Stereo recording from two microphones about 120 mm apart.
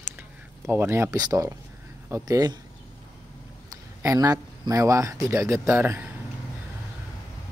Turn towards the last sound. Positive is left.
turn(degrees=-20)  # may be behind; listen again after turning